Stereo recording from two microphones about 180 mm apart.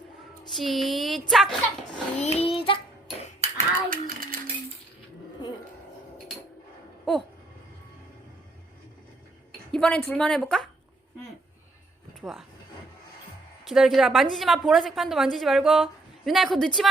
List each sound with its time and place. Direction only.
0.5 s a woman's voice: centre (ahead or behind)
2.1 s child singing: 35° left (ahead or behind)
3.4 s a sound: 35° right (ahead or behind)
3.8 s a sound: 50° right (ahead or behind)
9.7 s a woman's voice: 5° left (ahead or behind)
12.2 s speech: centre (ahead or behind)
13.7 s a woman's voice: centre (ahead or behind)